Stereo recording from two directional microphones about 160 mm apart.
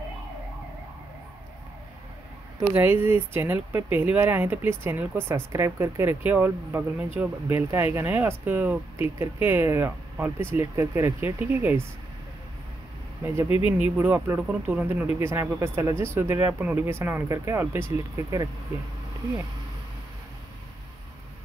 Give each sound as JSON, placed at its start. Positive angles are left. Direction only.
{"t": 2.7, "sound": "speech", "side_deg": -15}
{"t": 13.2, "sound": "speech", "side_deg": -15}